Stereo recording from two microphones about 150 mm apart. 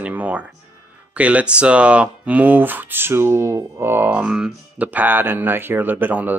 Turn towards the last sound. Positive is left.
turn(degrees=-10)  # may be behind; listen again after turning